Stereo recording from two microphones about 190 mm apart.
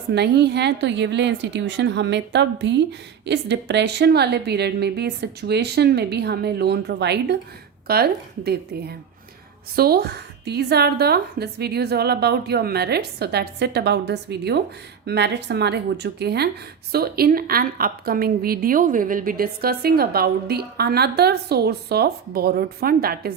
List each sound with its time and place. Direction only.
0.1 s a woman's voice: 60° right (ahead or behind)